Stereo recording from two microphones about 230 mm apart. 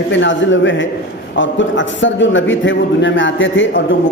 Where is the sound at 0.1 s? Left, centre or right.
Left.